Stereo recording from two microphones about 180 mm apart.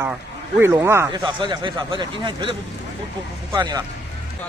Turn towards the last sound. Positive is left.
turn(degrees=-20)  # may be behind; listen again after turning